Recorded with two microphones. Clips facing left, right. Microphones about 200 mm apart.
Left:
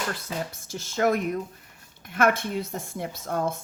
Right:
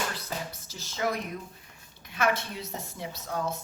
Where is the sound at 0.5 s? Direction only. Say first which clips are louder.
Left 10 dB; 50° left (ahead or behind).